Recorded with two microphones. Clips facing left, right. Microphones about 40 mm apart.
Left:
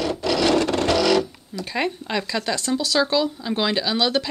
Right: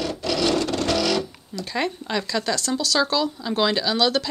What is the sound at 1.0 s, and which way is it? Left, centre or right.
Music, centre.